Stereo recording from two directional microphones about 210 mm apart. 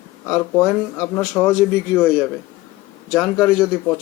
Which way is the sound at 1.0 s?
10° left (ahead or behind).